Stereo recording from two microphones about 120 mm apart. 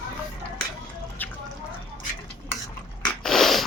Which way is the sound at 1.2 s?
15° left (ahead or behind).